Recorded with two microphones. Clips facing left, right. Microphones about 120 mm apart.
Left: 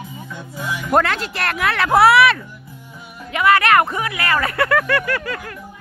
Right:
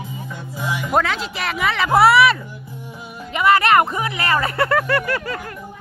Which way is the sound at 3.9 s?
25° right (ahead or behind).